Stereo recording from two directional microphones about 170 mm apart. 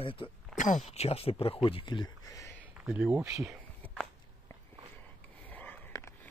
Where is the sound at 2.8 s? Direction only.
5° right (ahead or behind).